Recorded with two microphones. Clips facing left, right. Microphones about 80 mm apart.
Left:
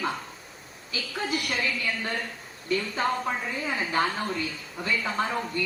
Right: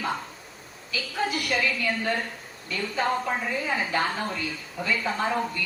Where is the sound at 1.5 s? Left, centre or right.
Right.